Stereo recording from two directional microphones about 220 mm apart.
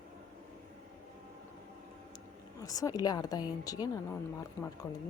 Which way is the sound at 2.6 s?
15° left (ahead or behind).